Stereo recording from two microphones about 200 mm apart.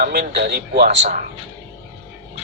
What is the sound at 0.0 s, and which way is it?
Speech, 50° right (ahead or behind).